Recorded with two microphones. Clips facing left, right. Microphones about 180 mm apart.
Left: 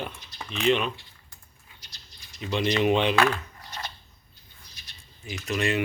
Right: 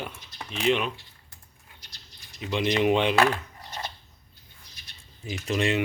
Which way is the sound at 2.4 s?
15° right (ahead or behind).